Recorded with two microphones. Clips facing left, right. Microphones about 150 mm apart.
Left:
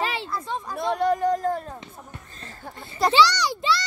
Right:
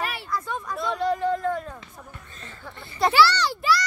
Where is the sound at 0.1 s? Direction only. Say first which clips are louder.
Left 1 dB; 25° left (ahead or behind).